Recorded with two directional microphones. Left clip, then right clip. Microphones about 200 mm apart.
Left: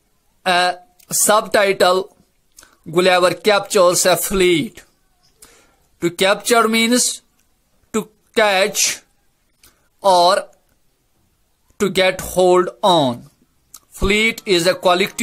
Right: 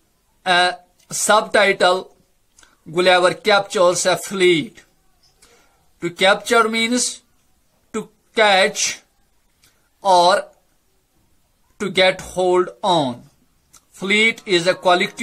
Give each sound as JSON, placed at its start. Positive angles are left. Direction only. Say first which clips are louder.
{"t": 0.4, "sound": "speech", "louder": "even", "side_deg": 40}
{"t": 5.9, "sound": "a woman's voice", "louder": "even", "side_deg": 40}
{"t": 11.7, "sound": "speech", "louder": "even", "side_deg": 40}